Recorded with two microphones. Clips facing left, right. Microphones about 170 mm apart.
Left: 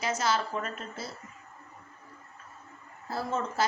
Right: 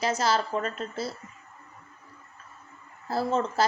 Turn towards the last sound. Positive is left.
turn(degrees=-35)  # may be behind; listen again after turning